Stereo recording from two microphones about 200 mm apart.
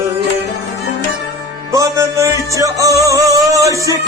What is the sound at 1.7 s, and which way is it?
Music, 15° right (ahead or behind).